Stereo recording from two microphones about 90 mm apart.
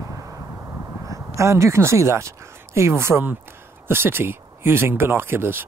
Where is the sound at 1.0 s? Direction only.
35° right (ahead or behind).